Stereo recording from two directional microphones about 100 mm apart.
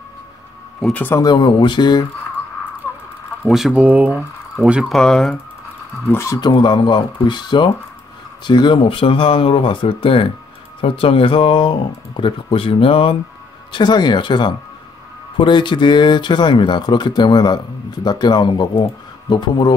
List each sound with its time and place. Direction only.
0.9 s speech: 20° left (ahead or behind)
1.2 s speech: 50° left (ahead or behind)
3.4 s speech: 5° right (ahead or behind)
3.7 s speech: 15° right (ahead or behind)
4.8 s speech: 5° left (ahead or behind)
6.0 s speech: 25° left (ahead or behind)
6.4 s speech: 45° left (ahead or behind); by 13.2 s 65° left (ahead or behind)
13.7 s speech: 50° left (ahead or behind)